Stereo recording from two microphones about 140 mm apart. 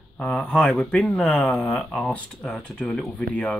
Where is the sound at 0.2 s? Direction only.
5° left (ahead or behind).